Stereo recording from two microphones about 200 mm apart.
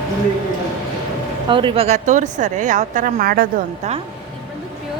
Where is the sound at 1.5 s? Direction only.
25° right (ahead or behind); by 3.9 s 45° right (ahead or behind).